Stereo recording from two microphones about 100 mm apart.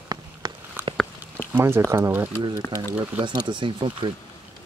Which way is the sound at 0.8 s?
20° right (ahead or behind).